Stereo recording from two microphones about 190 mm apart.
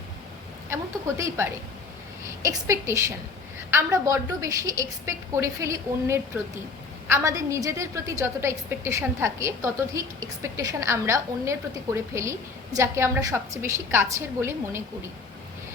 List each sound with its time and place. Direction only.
0.7 s a woman's voice: 15° right (ahead or behind)